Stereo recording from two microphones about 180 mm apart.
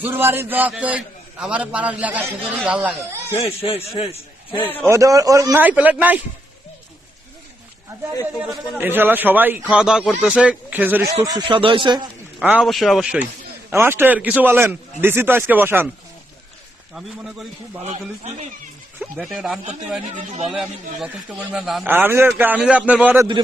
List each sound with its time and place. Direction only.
0.0 s speech: 10° right (ahead or behind)
3.3 s speech: 35° left (ahead or behind)
4.9 s speech: 20° right (ahead or behind)
8.4 s speech: 10° right (ahead or behind)
11.2 s speech: 20° right (ahead or behind)
12.4 s a man's voice: 5° right (ahead or behind)
19.1 s a man's voice: centre (ahead or behind)
20.1 s a man's voice: 40° right (ahead or behind)
20.5 s a man's voice: centre (ahead or behind)
21.8 s speech: 10° right (ahead or behind)